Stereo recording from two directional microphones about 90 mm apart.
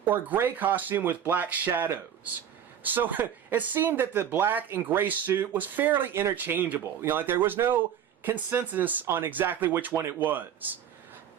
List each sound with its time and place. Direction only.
0.1 s speech: 20° right (ahead or behind)